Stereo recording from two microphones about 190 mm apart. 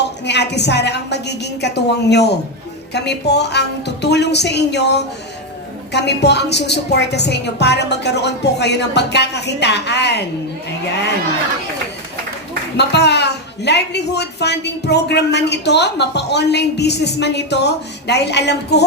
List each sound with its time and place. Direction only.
0.3 s a woman's voice: 65° left (ahead or behind)
12.7 s a woman's voice: 60° left (ahead or behind)